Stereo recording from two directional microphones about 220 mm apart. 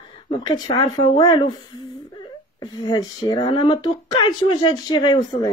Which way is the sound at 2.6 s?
20° left (ahead or behind).